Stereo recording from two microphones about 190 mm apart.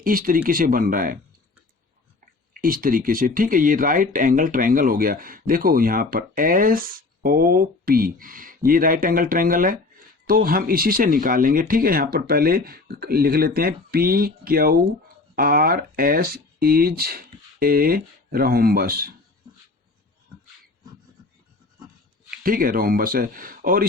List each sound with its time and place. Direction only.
0.0 s speech: 45° right (ahead or behind)
2.5 s speech: 50° right (ahead or behind)
22.3 s speech: 50° right (ahead or behind)